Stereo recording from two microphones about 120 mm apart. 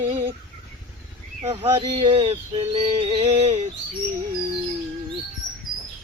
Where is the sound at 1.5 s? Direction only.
60° right (ahead or behind).